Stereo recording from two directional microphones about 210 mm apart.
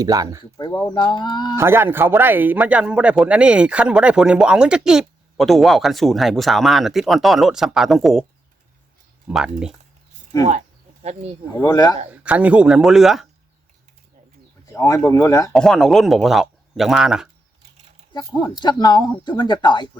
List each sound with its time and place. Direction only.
0.0 s speech: 15° right (ahead or behind)
0.5 s speech: 20° left (ahead or behind)
1.5 s a man's voice: 10° right (ahead or behind)
9.2 s a man's voice: 5° right (ahead or behind)
11.0 s speech: 30° right (ahead or behind)
11.5 s speech: 15° left (ahead or behind)
12.1 s a man's voice: 5° right (ahead or behind)
14.7 s speech: 15° left (ahead or behind)
15.5 s a man's voice: centre (ahead or behind)
18.1 s speech: 20° left (ahead or behind)